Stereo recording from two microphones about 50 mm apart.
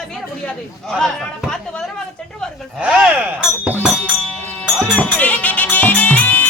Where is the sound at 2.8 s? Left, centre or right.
Right.